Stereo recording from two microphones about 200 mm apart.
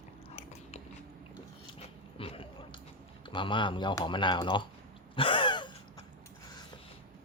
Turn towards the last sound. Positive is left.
turn(degrees=25)  # may be behind; listen again after turning